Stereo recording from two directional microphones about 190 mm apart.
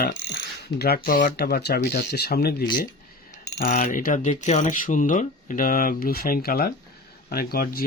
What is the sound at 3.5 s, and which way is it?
Speech, 40° left (ahead or behind).